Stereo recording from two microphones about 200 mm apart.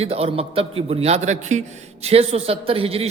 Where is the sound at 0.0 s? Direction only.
30° right (ahead or behind).